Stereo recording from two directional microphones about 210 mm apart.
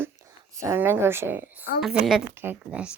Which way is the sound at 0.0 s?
15° right (ahead or behind).